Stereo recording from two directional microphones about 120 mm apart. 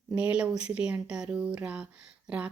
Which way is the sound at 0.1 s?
10° right (ahead or behind).